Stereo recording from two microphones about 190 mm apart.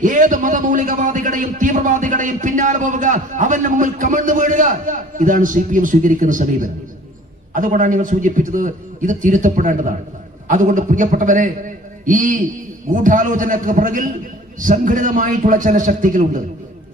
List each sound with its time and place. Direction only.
0.0 s a man's voice: 45° right (ahead or behind)